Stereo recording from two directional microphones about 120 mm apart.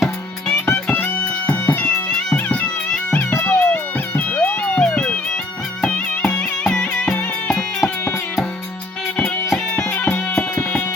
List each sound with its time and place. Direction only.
0.9 s music: 15° left (ahead or behind)
9.1 s music: 5° left (ahead or behind)